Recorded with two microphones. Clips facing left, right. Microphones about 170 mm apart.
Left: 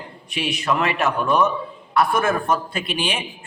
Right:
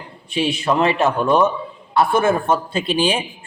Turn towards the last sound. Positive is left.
turn(degrees=-30)  # may be behind; listen again after turning